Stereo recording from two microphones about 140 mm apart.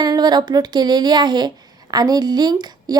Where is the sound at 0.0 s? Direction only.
30° right (ahead or behind).